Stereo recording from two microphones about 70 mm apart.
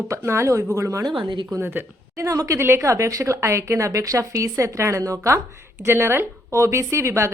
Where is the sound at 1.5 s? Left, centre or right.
Right.